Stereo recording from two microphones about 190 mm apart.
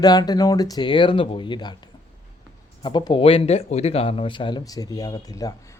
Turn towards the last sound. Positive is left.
turn(degrees=20)  # may be behind; listen again after turning